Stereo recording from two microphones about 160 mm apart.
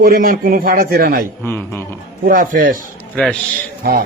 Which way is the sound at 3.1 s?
5° left (ahead or behind).